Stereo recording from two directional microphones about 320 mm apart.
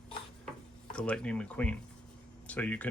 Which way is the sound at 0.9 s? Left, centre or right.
Centre.